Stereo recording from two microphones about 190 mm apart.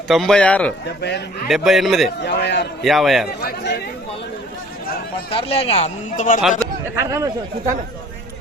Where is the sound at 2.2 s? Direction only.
65° left (ahead or behind).